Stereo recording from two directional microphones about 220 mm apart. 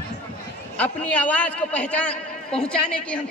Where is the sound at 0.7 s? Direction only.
5° left (ahead or behind).